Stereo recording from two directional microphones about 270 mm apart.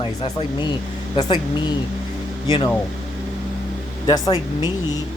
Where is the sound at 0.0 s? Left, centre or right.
Left.